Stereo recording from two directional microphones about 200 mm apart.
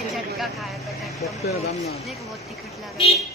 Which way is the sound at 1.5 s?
30° left (ahead or behind).